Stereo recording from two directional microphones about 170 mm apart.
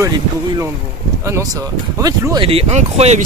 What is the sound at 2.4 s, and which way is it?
Speech, 35° right (ahead or behind).